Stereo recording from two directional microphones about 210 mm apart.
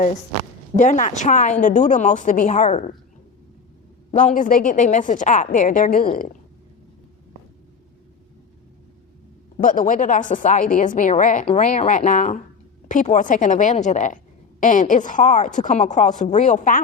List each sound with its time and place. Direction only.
0.8 s a woman's voice: 35° left (ahead or behind)
4.1 s a woman's voice: 35° left (ahead or behind)
9.6 s a woman's voice: 40° left (ahead or behind)